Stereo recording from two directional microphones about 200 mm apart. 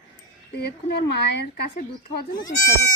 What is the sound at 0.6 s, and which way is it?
Speech, 55° left (ahead or behind).